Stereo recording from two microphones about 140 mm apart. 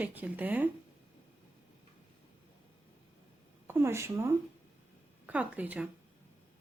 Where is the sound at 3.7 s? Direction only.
15° right (ahead or behind).